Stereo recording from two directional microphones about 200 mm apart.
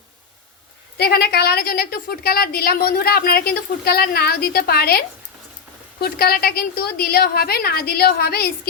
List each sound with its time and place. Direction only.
0.9 s a woman's voice: 50° left (ahead or behind)